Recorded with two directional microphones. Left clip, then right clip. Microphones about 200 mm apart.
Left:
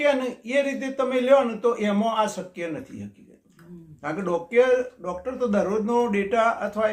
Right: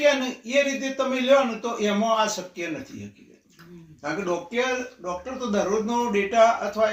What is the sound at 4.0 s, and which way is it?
Speech, 30° left (ahead or behind).